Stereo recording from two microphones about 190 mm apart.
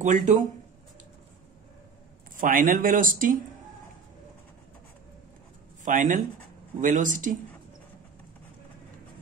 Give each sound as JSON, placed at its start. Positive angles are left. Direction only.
{"t": 0.0, "sound": "speech", "side_deg": -40}
{"t": 2.3, "sound": "speech", "side_deg": -45}
{"t": 5.9, "sound": "speech", "side_deg": -45}